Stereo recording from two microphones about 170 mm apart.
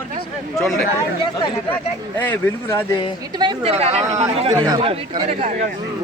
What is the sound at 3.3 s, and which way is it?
A woman's voice, 25° right (ahead or behind).